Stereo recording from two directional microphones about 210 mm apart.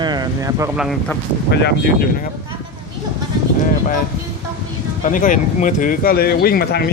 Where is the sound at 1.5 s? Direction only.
50° left (ahead or behind).